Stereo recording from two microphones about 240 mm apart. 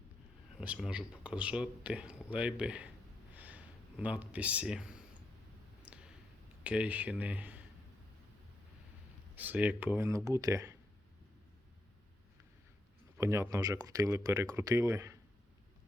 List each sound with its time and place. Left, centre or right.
0.6 s speech: centre
5.9 s a sound: centre
6.7 s speech: centre
9.3 s speech: centre
13.1 s speech: centre